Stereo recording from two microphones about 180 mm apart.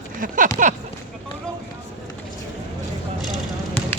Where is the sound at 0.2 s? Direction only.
45° right (ahead or behind).